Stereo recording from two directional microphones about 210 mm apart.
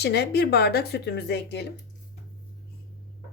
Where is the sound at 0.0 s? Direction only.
50° left (ahead or behind).